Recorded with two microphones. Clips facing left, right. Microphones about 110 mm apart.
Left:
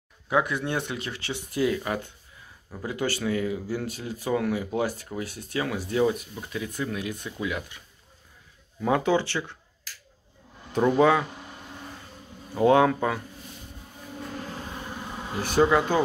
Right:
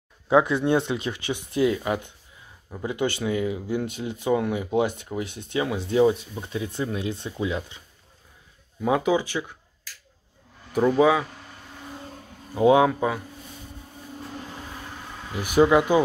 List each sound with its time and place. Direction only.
0.3 s speech: 20° right (ahead or behind)
8.8 s speech: 10° right (ahead or behind)
11.0 s speech: 5° right (ahead or behind)
11.2 s a sound: 10° left (ahead or behind)
12.5 s speech: 10° right (ahead or behind)
15.0 s insect: 15° left (ahead or behind)
15.4 s speech: 10° right (ahead or behind)